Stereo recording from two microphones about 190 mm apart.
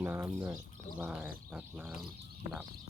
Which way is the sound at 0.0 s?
10° right (ahead or behind).